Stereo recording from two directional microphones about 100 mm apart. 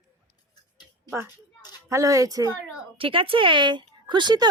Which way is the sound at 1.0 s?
25° right (ahead or behind).